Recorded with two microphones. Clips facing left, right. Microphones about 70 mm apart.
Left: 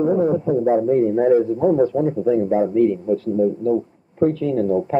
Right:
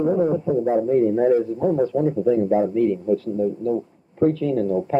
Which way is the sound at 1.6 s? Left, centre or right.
Centre.